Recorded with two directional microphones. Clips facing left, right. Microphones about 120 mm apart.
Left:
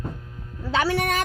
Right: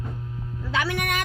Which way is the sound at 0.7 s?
35° left (ahead or behind).